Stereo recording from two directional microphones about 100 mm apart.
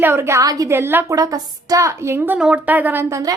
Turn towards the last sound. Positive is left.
turn(degrees=-30)  # may be behind; listen again after turning